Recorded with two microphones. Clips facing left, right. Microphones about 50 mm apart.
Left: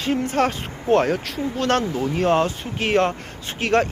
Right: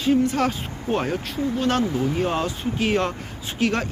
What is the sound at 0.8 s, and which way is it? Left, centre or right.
Speech, left.